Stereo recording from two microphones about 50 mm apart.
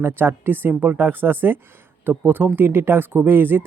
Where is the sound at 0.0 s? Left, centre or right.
Right.